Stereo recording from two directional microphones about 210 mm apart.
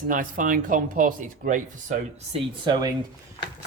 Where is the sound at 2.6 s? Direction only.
20° right (ahead or behind).